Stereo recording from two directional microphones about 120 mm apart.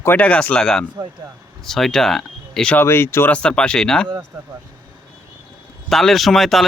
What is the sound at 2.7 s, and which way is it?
Speech, 20° left (ahead or behind).